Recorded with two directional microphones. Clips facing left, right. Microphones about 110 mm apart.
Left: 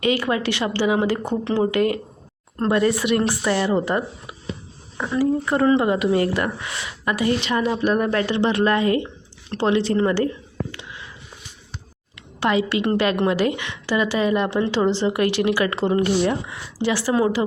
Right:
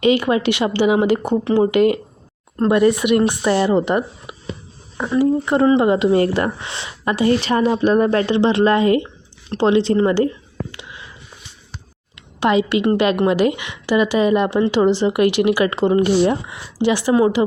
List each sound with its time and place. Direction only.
0.0 s speech: 20° right (ahead or behind)
12.1 s a woman's voice: 20° right (ahead or behind)